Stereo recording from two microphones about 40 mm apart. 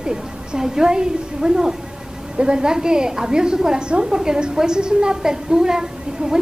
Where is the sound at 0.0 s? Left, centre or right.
Centre.